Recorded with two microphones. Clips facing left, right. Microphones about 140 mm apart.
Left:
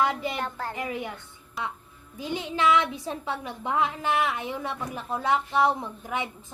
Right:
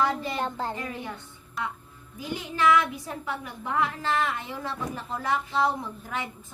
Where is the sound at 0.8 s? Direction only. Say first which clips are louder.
Left 3 dB; 15° left (ahead or behind).